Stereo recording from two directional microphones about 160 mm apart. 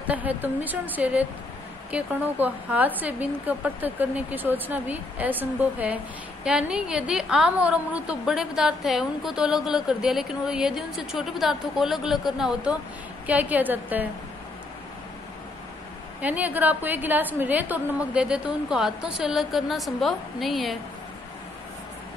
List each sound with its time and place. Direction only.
0.1 s a woman's voice: 10° right (ahead or behind)
16.2 s a woman's voice: 10° right (ahead or behind)